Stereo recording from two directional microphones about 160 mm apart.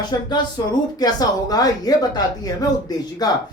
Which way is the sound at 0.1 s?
25° left (ahead or behind).